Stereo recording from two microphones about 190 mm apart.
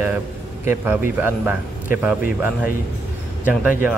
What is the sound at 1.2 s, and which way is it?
A man's voice, 10° right (ahead or behind).